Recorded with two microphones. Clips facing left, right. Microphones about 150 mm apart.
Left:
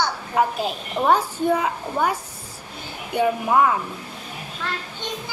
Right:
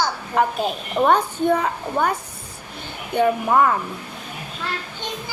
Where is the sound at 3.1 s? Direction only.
5° left (ahead or behind).